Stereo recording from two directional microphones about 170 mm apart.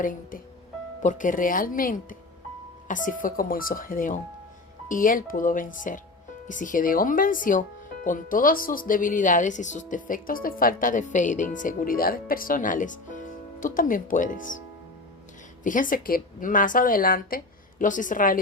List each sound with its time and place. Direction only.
0.0 s speech: 55° left (ahead or behind)
15.6 s speech: 50° left (ahead or behind)